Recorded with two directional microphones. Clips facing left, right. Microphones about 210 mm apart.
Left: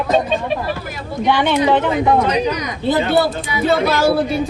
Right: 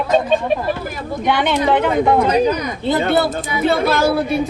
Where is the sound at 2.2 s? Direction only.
50° right (ahead or behind).